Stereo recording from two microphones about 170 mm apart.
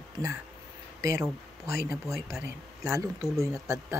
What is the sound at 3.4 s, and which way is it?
Speech, 15° right (ahead or behind).